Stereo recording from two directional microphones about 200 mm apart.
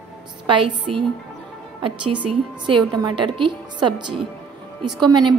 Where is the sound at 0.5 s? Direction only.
25° right (ahead or behind).